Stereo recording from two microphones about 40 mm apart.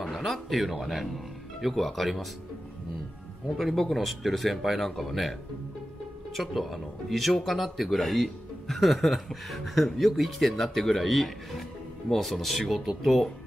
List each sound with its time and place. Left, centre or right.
0.2 s speech: centre
3.9 s speech: centre
6.3 s speech: centre